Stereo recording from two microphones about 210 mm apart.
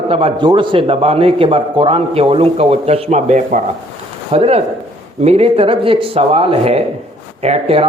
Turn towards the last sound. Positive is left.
turn(degrees=-30)  # may be behind; listen again after turning